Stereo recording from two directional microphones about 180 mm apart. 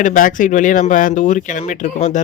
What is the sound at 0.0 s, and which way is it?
Speech, 45° left (ahead or behind).